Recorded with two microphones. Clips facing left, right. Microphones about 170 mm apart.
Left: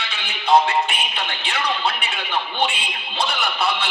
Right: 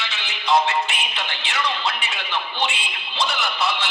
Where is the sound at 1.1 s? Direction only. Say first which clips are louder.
Left 1 dB; 55° left (ahead or behind).